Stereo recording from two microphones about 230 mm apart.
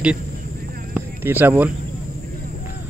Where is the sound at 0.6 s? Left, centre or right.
Right.